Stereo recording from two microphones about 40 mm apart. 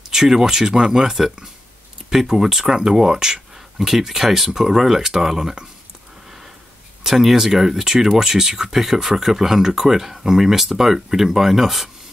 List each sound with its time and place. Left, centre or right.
0.1 s speech: centre
7.0 s speech: centre